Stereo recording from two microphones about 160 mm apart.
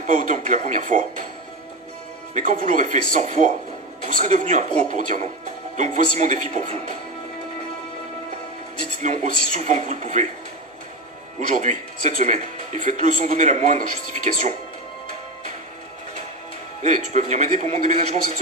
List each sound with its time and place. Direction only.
0.0 s a man's voice: 55° right (ahead or behind)
2.3 s a man's voice: 55° right (ahead or behind)
9.0 s a man's voice: 50° right (ahead or behind)
11.3 s a man's voice: 50° right (ahead or behind)
16.8 s a man's voice: 45° right (ahead or behind)